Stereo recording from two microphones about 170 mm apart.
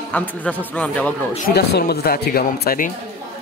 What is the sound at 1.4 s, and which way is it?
Speech, 65° left (ahead or behind).